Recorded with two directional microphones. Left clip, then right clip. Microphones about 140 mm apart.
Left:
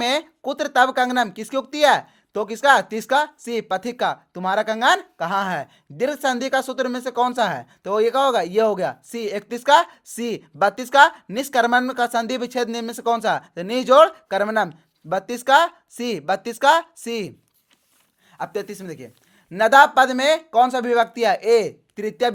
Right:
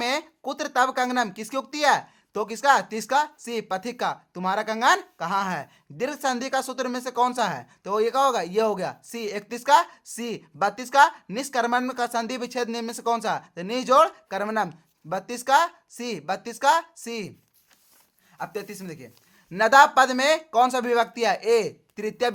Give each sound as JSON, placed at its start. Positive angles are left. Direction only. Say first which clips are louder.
{"t": 0.0, "sound": "speech", "louder": "left 5 dB", "side_deg": 30}
{"t": 18.3, "sound": "speech", "louder": "left 5 dB", "side_deg": 40}
{"t": 19.5, "sound": "speech", "louder": "left 3 dB", "side_deg": 25}